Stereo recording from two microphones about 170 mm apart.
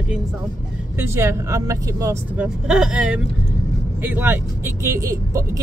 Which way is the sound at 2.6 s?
5° right (ahead or behind).